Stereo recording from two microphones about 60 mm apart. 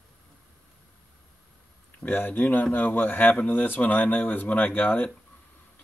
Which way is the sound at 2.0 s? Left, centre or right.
Left.